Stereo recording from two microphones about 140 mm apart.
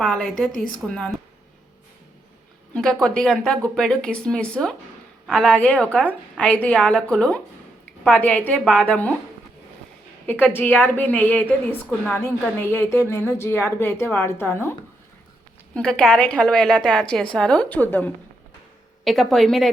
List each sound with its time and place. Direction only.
0.0 s speech: 5° left (ahead or behind)
2.7 s a woman's voice: 5° left (ahead or behind)
10.2 s a woman's voice: 15° left (ahead or behind)
15.7 s a woman's voice: 5° left (ahead or behind)
19.0 s speech: centre (ahead or behind)